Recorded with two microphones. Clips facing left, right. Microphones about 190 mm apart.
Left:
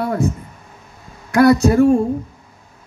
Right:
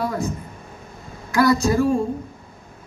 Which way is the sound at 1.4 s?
65° left (ahead or behind).